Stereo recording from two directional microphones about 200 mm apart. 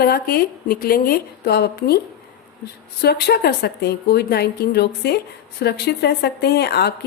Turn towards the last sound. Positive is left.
turn(degrees=55)  # may be behind; listen again after turning